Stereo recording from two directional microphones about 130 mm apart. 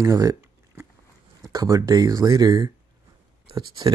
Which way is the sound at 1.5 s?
30° right (ahead or behind).